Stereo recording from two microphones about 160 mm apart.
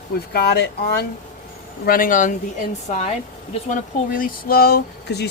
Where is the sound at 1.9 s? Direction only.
60° left (ahead or behind).